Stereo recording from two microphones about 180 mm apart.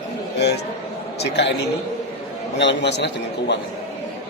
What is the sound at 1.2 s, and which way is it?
Speech, 70° left (ahead or behind).